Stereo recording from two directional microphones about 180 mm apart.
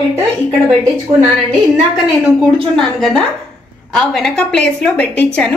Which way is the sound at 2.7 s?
5° left (ahead or behind).